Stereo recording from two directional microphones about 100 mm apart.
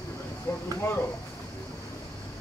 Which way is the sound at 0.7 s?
25° left (ahead or behind).